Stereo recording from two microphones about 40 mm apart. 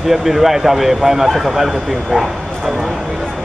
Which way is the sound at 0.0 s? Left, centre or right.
Centre.